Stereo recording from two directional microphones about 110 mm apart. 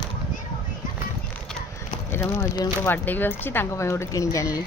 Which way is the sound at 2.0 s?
20° left (ahead or behind).